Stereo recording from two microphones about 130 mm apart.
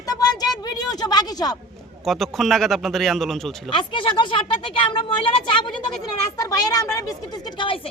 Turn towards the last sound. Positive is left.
turn(degrees=45)  # may be behind; listen again after turning